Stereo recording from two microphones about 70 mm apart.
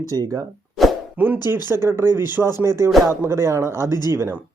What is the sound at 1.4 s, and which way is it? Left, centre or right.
Speech, left.